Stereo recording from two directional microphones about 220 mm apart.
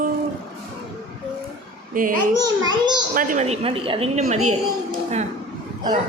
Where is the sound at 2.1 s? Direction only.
90° right.